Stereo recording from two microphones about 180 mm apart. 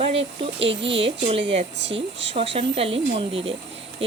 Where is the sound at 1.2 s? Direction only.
30° right (ahead or behind).